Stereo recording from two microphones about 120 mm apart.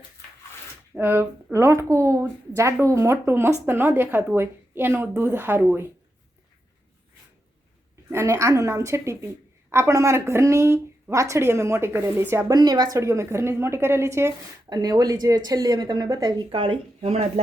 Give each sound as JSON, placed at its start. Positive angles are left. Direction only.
{"t": 0.9, "sound": "a woman's voice", "side_deg": -15}
{"t": 8.1, "sound": "a woman's voice", "side_deg": -25}
{"t": 12.5, "sound": "a woman's voice", "side_deg": -35}
{"t": 14.7, "sound": "a woman's voice", "side_deg": -35}
{"t": 17.0, "sound": "speech", "side_deg": -60}